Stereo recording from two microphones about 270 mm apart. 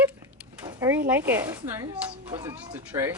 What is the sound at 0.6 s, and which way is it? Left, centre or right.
Speech, centre.